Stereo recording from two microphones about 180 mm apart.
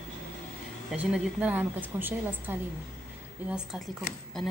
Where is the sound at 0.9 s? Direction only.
5° right (ahead or behind).